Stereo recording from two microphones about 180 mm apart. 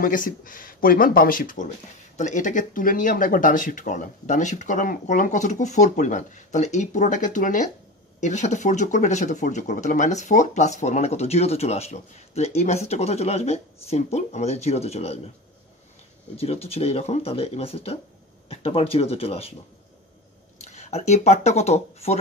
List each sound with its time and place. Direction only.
0.0 s speech: 50° left (ahead or behind)
16.3 s speech: 35° left (ahead or behind)
20.5 s speech: 40° left (ahead or behind)